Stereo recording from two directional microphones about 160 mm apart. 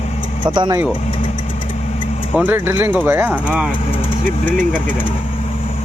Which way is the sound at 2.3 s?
10° right (ahead or behind).